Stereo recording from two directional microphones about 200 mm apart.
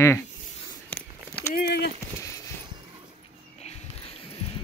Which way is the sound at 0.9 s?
10° left (ahead or behind).